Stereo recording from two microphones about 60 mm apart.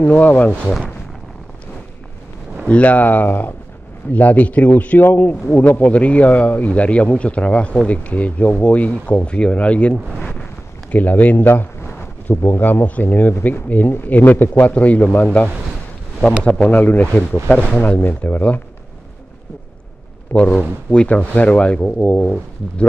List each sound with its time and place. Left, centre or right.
0.0 s speech: left
2.7 s speech: left
10.9 s a sound: left
12.4 s speech: left
20.3 s speech: left